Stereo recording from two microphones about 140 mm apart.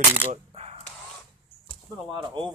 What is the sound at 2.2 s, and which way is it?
Speech, 35° right (ahead or behind).